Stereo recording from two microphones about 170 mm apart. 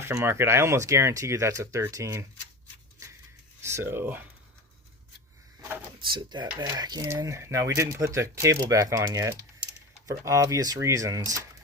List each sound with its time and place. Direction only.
0.0 s speech: 15° right (ahead or behind)
3.6 s speech: 15° right (ahead or behind)
6.0 s speech: 25° right (ahead or behind)